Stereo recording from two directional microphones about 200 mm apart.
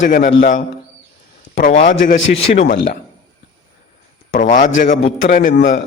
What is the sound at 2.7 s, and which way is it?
Speech, 55° left (ahead or behind).